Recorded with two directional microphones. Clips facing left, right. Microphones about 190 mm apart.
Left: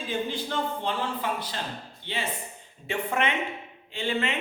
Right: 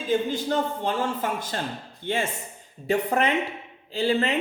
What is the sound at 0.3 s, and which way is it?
A man's voice, 45° right (ahead or behind).